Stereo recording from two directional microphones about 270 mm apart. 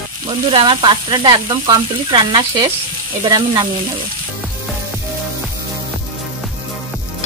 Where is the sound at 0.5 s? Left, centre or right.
Centre.